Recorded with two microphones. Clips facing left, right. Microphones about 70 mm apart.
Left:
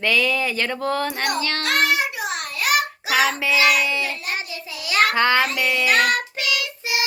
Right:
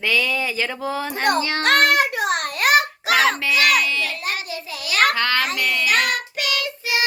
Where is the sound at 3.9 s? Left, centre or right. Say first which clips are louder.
Even; left.